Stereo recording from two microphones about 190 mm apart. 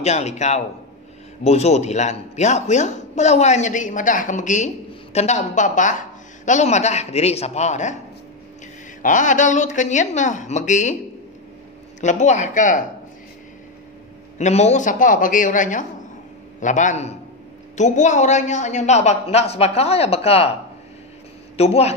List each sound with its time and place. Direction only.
0.0 s speech: 35° left (ahead or behind)
9.0 s speech: 40° left (ahead or behind)
12.0 s speech: 40° left (ahead or behind)
14.4 s a woman's voice: 35° left (ahead or behind)
21.5 s speech: 35° left (ahead or behind)